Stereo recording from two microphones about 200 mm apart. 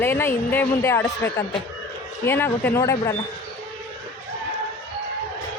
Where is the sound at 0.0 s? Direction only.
10° left (ahead or behind).